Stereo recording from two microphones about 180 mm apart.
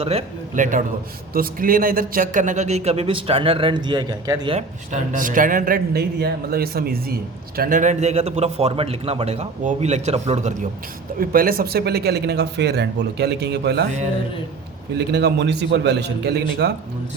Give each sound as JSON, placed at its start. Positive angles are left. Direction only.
{"t": 0.0, "sound": "a man's voice", "side_deg": -35}
{"t": 0.5, "sound": "a man's voice", "side_deg": -45}
{"t": 4.5, "sound": "speech", "side_deg": -45}
{"t": 11.2, "sound": "speech", "side_deg": -55}
{"t": 14.9, "sound": "a man's voice", "side_deg": -70}